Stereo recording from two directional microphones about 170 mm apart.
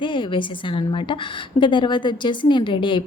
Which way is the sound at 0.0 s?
30° left (ahead or behind).